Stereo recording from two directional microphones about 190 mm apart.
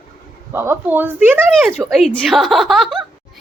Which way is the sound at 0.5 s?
15° right (ahead or behind).